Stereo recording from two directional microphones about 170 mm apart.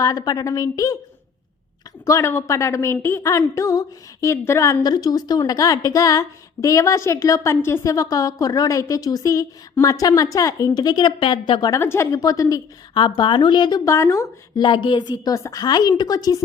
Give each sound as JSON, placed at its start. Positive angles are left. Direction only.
{"t": 0.0, "sound": "a woman's voice", "side_deg": 20}
{"t": 2.0, "sound": "a woman's voice", "side_deg": 15}
{"t": 11.7, "sound": "a woman's voice", "side_deg": 15}